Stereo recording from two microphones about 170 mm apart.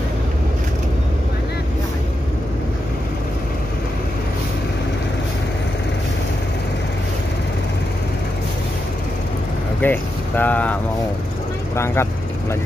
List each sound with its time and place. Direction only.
9.8 s speech: 10° left (ahead or behind)